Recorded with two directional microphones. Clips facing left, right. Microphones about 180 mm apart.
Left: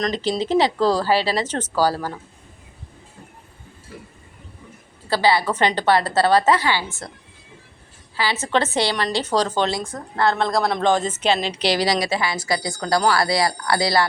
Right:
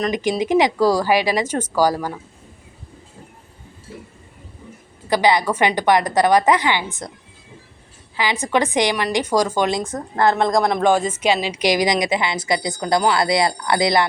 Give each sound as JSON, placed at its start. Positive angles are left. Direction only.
{"t": 0.0, "sound": "a woman's voice", "side_deg": -15}
{"t": 5.0, "sound": "a woman's voice", "side_deg": -15}
{"t": 8.1, "sound": "a woman's voice", "side_deg": -15}